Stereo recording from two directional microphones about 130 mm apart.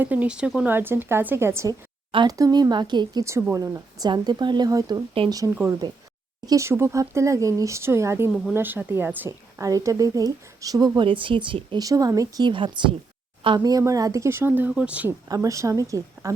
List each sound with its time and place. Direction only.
0.0 s a woman's voice: 10° right (ahead or behind); by 11.8 s 40° right (ahead or behind)
11.8 s a woman's voice: 30° right (ahead or behind); by 15.1 s 10° right (ahead or behind)
15.3 s a woman's voice: 25° right (ahead or behind)